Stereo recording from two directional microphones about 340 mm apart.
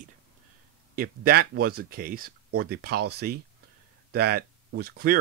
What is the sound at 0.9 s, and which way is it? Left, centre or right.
Speech, right.